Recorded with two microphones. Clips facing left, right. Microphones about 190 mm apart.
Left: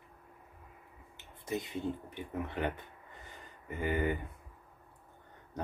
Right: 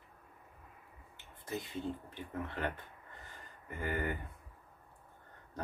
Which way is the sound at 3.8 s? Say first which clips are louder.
Left 5 dB; 20° left (ahead or behind).